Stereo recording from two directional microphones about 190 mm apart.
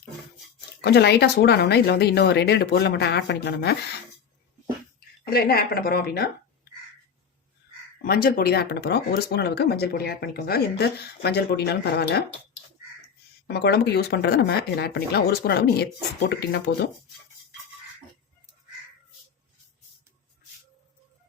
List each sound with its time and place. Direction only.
0.8 s speech: 60° left (ahead or behind)
4.9 s speech: 55° left (ahead or behind)
8.0 s speech: 55° left (ahead or behind)
13.5 s speech: 60° left (ahead or behind)